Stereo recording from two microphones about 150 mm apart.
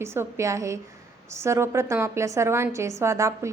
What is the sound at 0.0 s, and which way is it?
A woman's voice, 15° right (ahead or behind).